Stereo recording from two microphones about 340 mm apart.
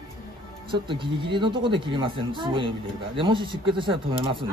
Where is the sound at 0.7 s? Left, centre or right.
Centre.